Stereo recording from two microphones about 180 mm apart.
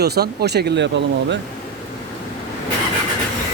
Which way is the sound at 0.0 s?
60° right (ahead or behind).